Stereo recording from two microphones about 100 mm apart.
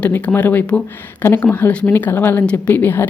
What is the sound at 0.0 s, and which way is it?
Speech, 15° left (ahead or behind).